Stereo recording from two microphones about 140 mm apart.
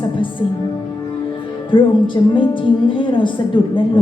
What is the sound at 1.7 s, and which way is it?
A woman's voice, 35° left (ahead or behind).